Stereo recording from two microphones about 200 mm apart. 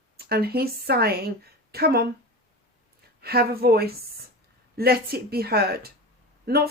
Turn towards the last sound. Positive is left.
turn(degrees=-50)  # may be behind; listen again after turning